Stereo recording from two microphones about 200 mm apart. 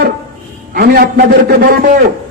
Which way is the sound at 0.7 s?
50° right (ahead or behind).